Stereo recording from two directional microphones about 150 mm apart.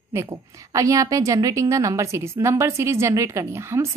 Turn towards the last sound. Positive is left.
turn(degrees=-20)  # may be behind; listen again after turning